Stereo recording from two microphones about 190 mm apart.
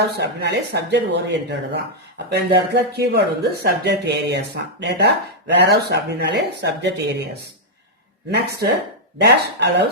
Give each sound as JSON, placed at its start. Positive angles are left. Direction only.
{"t": 0.2, "sound": "speech", "side_deg": -60}
{"t": 9.2, "sound": "speech", "side_deg": -55}